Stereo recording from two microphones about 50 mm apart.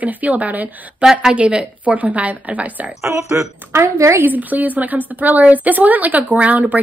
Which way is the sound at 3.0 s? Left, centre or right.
Right.